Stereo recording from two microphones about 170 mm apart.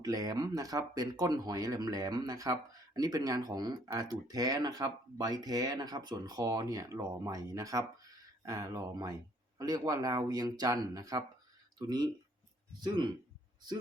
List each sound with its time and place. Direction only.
0.0 s speech: 20° right (ahead or behind)